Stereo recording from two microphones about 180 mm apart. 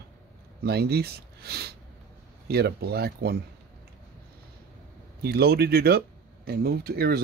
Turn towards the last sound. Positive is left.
turn(degrees=-60)  # may be behind; listen again after turning